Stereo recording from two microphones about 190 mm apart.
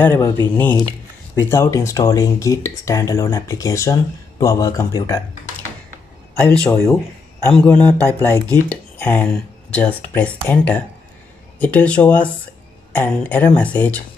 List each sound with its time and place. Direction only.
0.0 s speech: 10° left (ahead or behind)
6.3 s speech: 10° left (ahead or behind)